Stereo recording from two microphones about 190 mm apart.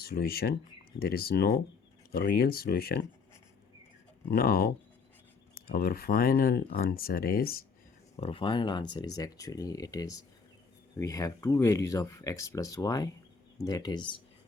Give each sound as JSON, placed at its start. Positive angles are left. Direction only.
{"t": 0.0, "sound": "speech", "side_deg": 55}
{"t": 4.3, "sound": "speech", "side_deg": 50}
{"t": 8.1, "sound": "speech", "side_deg": 30}